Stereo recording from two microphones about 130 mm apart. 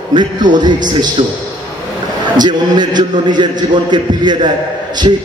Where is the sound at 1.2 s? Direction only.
45° right (ahead or behind).